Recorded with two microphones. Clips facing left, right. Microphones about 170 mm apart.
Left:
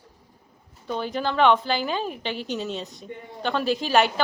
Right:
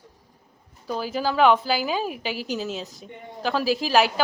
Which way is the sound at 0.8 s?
5° right (ahead or behind).